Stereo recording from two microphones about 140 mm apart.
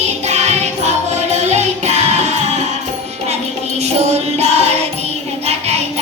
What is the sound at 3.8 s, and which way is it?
Music, 50° right (ahead or behind).